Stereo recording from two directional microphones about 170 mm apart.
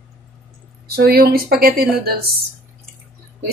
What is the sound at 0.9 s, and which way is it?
Speech, 65° right (ahead or behind).